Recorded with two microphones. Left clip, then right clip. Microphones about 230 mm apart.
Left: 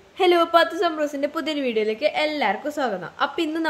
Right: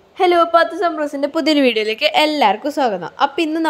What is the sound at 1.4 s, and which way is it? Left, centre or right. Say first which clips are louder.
A woman's voice: right 11 dB; right.